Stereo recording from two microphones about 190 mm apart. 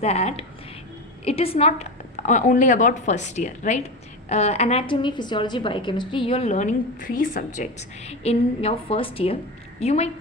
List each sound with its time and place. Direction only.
0.0 s a woman's voice: 35° left (ahead or behind)